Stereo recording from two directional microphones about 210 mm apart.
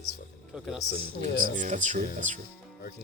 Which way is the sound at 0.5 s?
5° right (ahead or behind).